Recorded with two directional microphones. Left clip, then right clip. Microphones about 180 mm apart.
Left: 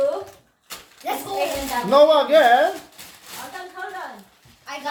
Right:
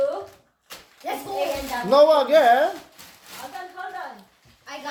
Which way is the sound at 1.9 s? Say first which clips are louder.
Left 1 dB; 25° right (ahead or behind).